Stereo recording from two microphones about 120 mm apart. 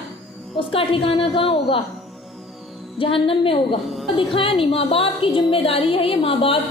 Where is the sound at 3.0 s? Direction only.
50° left (ahead or behind).